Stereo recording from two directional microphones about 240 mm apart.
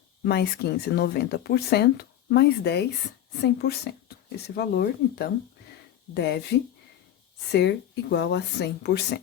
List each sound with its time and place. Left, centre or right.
0.3 s speech: left
8.1 s speech: left